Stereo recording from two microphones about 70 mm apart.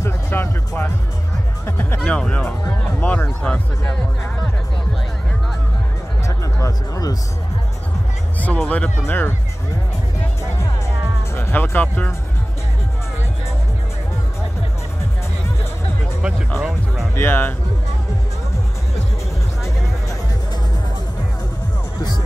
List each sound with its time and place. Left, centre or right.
0.0 s speech: left
2.0 s speech: centre
6.2 s music: left
8.5 s speech: centre
11.3 s speech: left
16.5 s speech: centre
17.1 s speech: left